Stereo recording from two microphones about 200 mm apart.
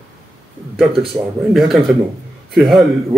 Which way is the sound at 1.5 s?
Centre (ahead or behind).